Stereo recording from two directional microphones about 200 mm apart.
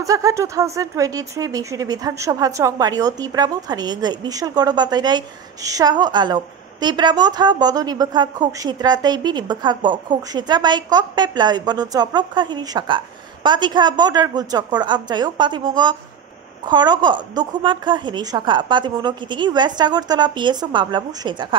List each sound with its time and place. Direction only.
0.0 s speech: 15° right (ahead or behind)